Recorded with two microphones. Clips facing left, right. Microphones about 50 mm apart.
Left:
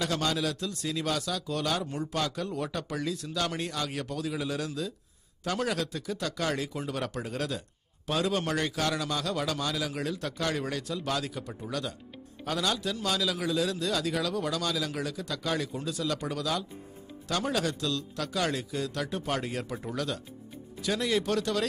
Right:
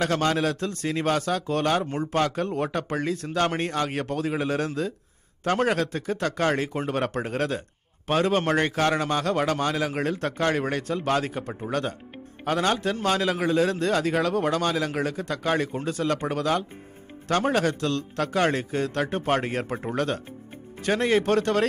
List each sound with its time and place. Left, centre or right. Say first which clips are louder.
0.0 s a man's voice: right 6 dB; right